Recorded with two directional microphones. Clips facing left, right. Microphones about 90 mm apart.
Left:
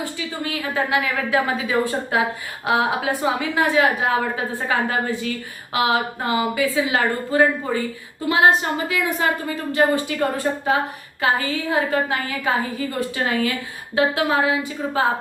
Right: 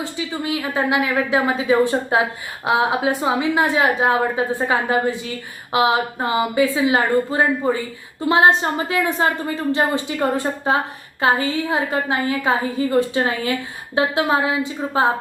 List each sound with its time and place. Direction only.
0.0 s a woman's voice: 20° right (ahead or behind)